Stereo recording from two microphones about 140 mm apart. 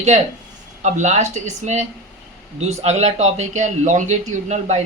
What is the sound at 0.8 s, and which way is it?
A man's voice, 55° right (ahead or behind).